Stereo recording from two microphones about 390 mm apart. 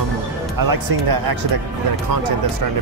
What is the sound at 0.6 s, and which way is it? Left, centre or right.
Speech, right.